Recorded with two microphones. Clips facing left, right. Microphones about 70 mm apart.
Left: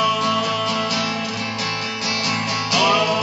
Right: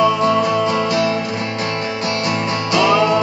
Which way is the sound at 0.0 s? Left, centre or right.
Right.